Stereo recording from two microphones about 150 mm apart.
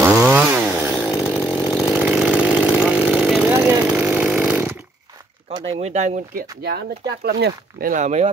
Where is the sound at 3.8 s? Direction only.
10° right (ahead or behind).